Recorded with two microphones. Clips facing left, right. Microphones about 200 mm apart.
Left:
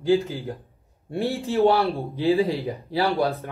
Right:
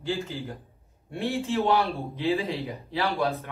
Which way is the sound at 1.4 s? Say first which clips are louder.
Left 5 dB; 35° left (ahead or behind).